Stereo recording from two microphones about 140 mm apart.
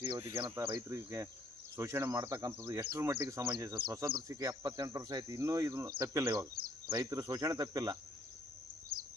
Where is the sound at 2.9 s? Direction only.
25° right (ahead or behind).